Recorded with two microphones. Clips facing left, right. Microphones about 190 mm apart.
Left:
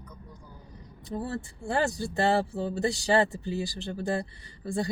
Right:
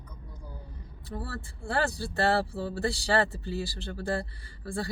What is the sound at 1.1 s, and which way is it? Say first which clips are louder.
Speech: left 5 dB; 20° left (ahead or behind).